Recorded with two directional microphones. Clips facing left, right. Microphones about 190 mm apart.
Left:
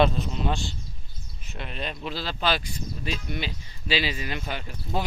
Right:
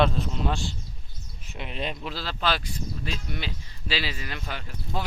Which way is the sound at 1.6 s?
15° right (ahead or behind).